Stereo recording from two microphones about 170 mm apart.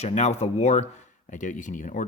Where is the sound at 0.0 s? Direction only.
40° left (ahead or behind).